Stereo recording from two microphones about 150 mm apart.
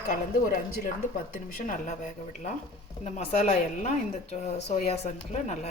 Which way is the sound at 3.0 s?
45° left (ahead or behind).